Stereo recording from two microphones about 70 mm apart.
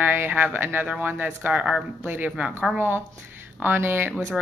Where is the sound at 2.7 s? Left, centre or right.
Right.